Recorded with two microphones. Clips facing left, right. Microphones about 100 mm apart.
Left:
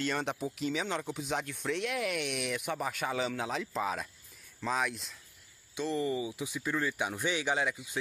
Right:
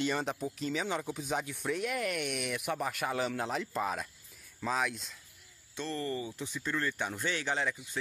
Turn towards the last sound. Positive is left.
turn(degrees=10)  # may be behind; listen again after turning